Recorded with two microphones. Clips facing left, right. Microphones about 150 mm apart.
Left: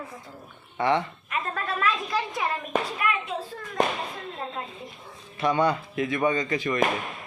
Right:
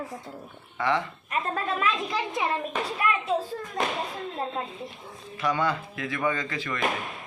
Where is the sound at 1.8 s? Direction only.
20° right (ahead or behind).